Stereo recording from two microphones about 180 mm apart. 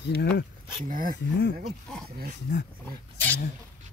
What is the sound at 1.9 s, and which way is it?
Speech, 5° left (ahead or behind).